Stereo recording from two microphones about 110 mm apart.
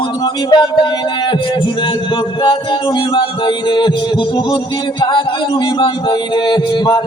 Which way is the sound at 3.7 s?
45° left (ahead or behind).